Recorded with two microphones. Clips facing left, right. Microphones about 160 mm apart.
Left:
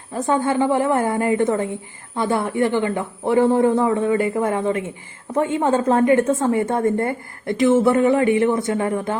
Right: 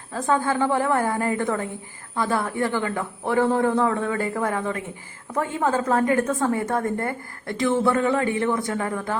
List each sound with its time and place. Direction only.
0.1 s a woman's voice: 20° left (ahead or behind)